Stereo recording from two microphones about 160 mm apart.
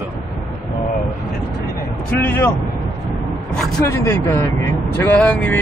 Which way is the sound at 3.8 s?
15° left (ahead or behind).